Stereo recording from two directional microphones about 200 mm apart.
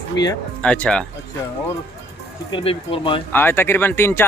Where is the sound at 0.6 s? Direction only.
5° left (ahead or behind).